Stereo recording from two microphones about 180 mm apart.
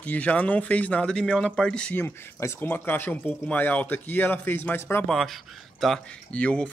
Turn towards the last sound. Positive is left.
turn(degrees=5)  # may be behind; listen again after turning